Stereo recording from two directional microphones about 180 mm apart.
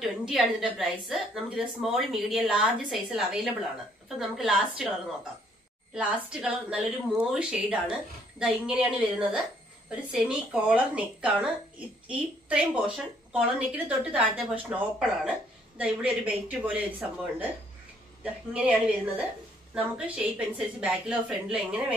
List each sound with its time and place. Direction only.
0.0 s a woman's voice: centre (ahead or behind)
5.9 s a woman's voice: 5° right (ahead or behind)
18.2 s a woman's voice: 5° right (ahead or behind)